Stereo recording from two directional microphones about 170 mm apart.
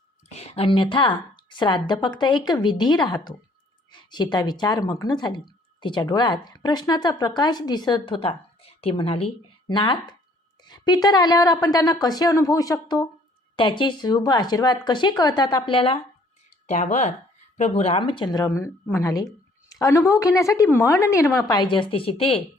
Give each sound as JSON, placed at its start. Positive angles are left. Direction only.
{"t": 0.3, "sound": "speech", "side_deg": 40}
{"t": 16.6, "sound": "a woman's voice", "side_deg": 45}